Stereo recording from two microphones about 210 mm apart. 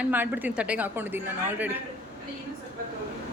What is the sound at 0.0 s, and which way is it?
Speech, 10° right (ahead or behind).